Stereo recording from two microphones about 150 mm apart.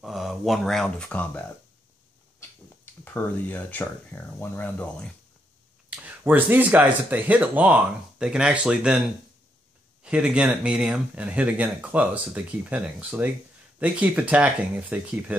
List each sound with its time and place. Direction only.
0.0 s speech: centre (ahead or behind)
2.8 s speech: 10° left (ahead or behind)
5.9 s speech: 10° right (ahead or behind)
10.0 s speech: 5° right (ahead or behind)